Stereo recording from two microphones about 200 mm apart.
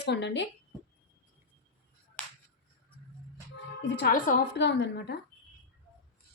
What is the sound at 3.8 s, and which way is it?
Speech, 60° left (ahead or behind).